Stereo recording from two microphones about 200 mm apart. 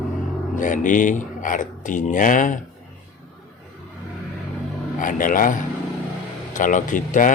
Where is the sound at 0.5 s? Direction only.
40° left (ahead or behind).